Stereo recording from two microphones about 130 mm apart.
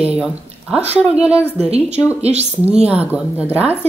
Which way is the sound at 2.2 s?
55° right (ahead or behind).